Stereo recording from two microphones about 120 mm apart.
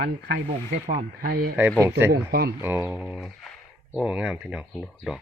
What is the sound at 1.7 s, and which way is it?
Speech, 20° right (ahead or behind).